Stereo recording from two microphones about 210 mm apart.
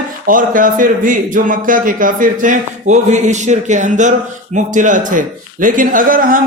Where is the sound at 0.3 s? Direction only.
40° right (ahead or behind).